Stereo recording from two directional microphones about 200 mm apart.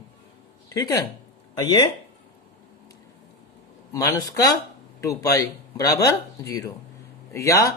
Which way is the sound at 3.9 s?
15° left (ahead or behind).